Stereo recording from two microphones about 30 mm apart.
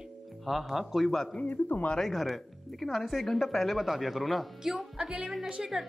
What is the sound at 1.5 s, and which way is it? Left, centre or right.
Speech, left.